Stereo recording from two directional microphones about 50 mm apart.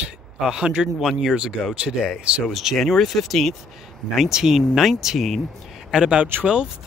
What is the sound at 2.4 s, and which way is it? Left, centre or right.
Speech, centre.